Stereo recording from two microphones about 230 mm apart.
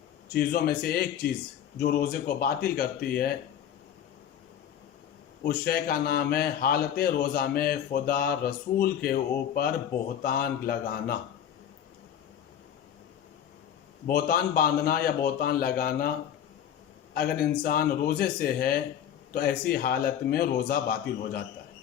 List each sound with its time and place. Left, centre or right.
0.3 s a man's voice: left
5.5 s a man's voice: left
10.2 s a man's voice: left
14.1 s a man's voice: left
17.2 s a man's voice: left